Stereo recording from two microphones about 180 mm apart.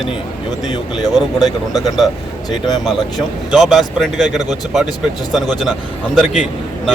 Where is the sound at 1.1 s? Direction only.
Centre (ahead or behind).